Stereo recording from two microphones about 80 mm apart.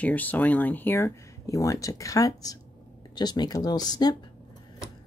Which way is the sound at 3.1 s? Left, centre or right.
Left.